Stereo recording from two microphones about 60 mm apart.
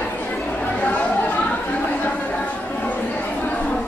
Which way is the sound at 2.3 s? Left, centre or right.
Left.